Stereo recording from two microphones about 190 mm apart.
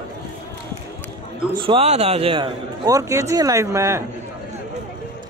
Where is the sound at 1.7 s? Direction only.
30° right (ahead or behind); by 4.0 s 15° right (ahead or behind).